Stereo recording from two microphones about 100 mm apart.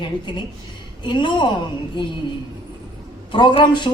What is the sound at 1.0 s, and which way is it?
Speech, 50° left (ahead or behind).